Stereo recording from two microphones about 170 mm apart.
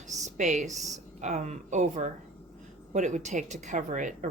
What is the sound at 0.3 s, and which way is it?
A woman's voice, 45° right (ahead or behind).